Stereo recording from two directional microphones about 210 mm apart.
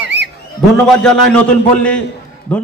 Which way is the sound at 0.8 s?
Centre (ahead or behind).